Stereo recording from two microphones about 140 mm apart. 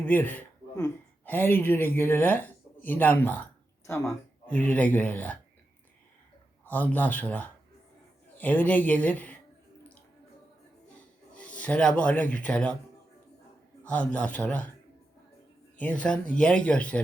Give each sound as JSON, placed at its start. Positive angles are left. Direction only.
{"t": 0.0, "sound": "speech", "side_deg": 15}
{"t": 6.7, "sound": "speech", "side_deg": 10}
{"t": 11.5, "sound": "speech", "side_deg": 10}
{"t": 13.8, "sound": "speech", "side_deg": 10}
{"t": 15.8, "sound": "speech", "side_deg": 10}